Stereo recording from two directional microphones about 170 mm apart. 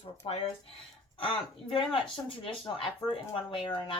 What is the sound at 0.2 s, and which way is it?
A woman's voice, 30° left (ahead or behind).